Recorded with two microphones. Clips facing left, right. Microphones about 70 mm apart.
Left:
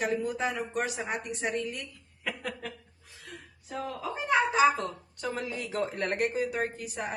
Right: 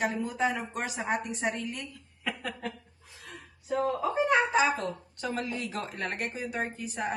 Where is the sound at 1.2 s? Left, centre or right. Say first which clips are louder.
Right 2 dB; right.